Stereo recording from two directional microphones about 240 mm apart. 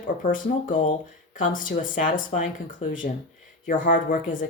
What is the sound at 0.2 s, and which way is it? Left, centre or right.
Speech, left.